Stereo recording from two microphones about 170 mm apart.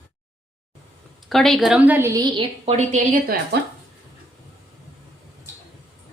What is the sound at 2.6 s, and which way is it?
Speech, 40° right (ahead or behind).